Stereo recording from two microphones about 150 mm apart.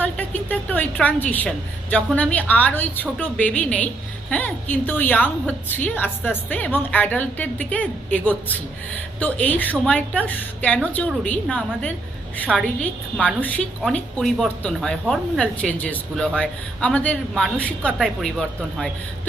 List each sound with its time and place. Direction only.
0.0 s a woman's voice: 10° left (ahead or behind)